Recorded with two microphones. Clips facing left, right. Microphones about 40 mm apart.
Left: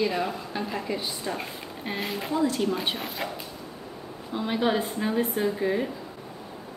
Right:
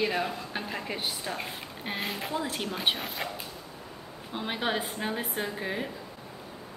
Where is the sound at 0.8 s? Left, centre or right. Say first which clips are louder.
Left 3 dB; right.